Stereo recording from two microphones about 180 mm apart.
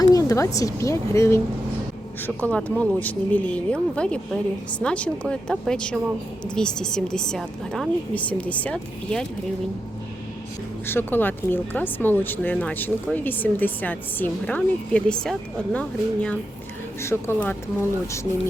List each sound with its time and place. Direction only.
0.0 s a woman's voice: 20° left (ahead or behind)
10.8 s speech: 10° left (ahead or behind)